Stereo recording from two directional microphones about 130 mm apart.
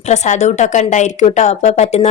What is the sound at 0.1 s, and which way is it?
A woman's voice, 65° left (ahead or behind).